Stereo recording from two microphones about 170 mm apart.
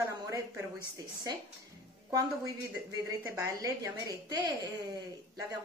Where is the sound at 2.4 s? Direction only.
20° right (ahead or behind).